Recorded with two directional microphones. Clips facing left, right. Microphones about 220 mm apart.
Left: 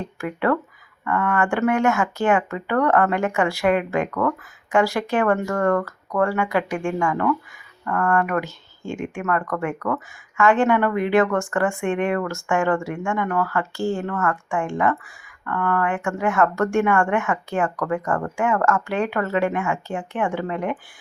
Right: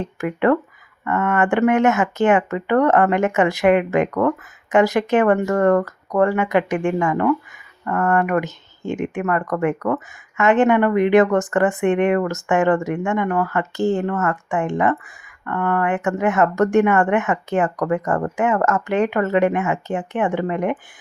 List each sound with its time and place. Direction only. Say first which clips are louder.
0.0 s speech: right 5 dB; 20° right (ahead or behind)